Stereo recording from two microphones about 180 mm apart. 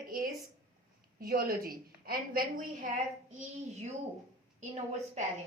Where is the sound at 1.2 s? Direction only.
55° right (ahead or behind).